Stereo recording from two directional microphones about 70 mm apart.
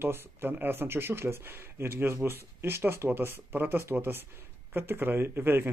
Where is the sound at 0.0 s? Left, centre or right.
Right.